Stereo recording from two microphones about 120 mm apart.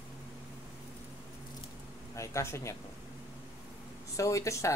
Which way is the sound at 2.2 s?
25° left (ahead or behind).